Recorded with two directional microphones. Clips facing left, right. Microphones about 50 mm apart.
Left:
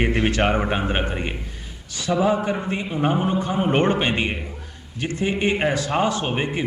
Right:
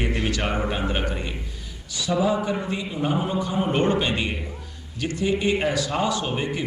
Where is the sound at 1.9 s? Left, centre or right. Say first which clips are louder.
Left 2 dB; left.